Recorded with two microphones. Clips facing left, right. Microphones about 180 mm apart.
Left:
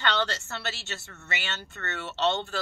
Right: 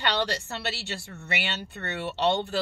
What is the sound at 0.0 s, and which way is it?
A woman's voice, 15° right (ahead or behind).